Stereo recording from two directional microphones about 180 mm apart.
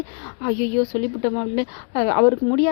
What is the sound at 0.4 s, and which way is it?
A woman's voice, 35° left (ahead or behind).